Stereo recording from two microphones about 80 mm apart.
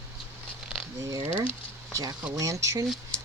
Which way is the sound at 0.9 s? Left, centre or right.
Right.